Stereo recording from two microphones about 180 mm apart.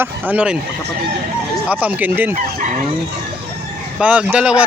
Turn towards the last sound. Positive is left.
turn(degrees=-5)  # may be behind; listen again after turning